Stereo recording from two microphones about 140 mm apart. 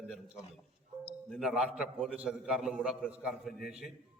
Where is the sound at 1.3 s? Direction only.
5° right (ahead or behind).